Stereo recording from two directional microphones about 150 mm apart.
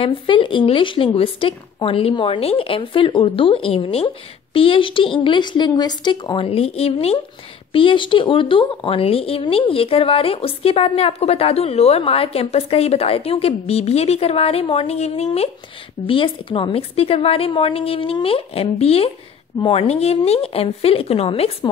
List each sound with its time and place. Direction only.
0.0 s speech: 35° left (ahead or behind)